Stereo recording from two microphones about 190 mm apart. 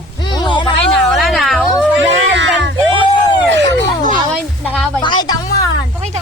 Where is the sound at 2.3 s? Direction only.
70° right (ahead or behind).